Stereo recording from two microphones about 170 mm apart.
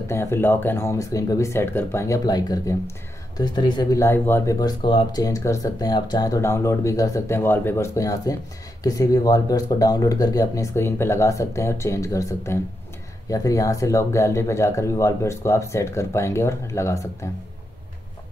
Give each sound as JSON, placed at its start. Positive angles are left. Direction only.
{"t": 0.1, "sound": "speech", "side_deg": 15}